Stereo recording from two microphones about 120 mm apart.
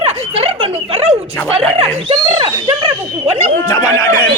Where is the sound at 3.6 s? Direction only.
25° left (ahead or behind).